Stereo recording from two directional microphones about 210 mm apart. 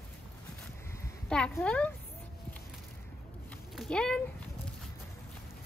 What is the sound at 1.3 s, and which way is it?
Speech, 5° left (ahead or behind).